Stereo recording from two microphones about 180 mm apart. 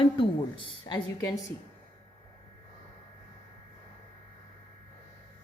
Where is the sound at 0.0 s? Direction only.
30° left (ahead or behind).